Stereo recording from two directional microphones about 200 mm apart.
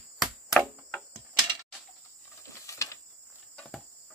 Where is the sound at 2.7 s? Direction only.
15° left (ahead or behind).